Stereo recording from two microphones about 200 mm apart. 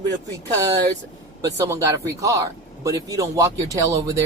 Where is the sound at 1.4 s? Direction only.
15° right (ahead or behind).